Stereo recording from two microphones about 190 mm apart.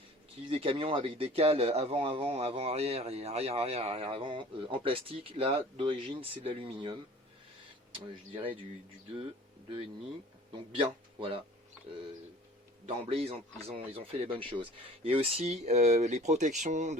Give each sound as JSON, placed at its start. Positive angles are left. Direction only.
{"t": 0.5, "sound": "speech", "side_deg": -30}
{"t": 10.8, "sound": "speech", "side_deg": -30}
{"t": 12.8, "sound": "speech", "side_deg": -30}